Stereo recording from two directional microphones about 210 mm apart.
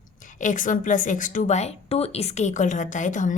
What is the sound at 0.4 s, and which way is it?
A woman's voice, 40° left (ahead or behind).